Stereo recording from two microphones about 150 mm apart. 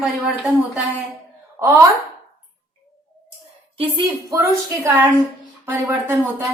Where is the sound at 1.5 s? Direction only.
20° right (ahead or behind).